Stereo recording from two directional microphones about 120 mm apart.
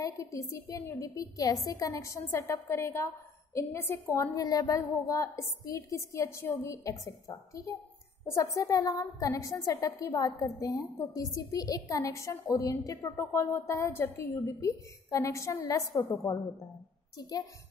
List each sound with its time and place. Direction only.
0.0 s a woman's voice: 25° left (ahead or behind)
17.2 s a woman's voice: 30° left (ahead or behind)